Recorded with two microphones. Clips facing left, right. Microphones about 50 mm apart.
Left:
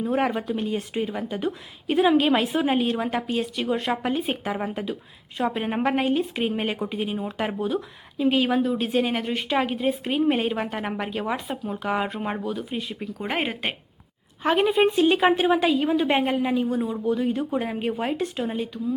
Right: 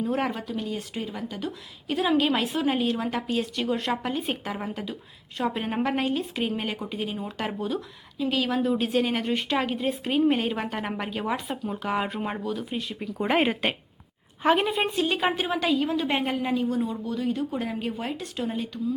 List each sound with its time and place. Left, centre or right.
0.0 s speech: centre
2.0 s a woman's voice: centre
8.2 s speech: left
8.6 s a woman's voice: centre